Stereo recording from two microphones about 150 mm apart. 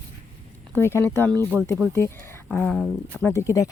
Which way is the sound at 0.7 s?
15° left (ahead or behind).